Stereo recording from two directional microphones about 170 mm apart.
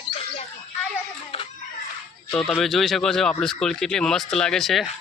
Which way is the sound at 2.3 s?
5° left (ahead or behind).